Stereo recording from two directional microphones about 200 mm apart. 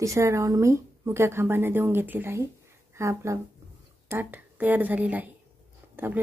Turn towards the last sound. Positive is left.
turn(degrees=-10)  # may be behind; listen again after turning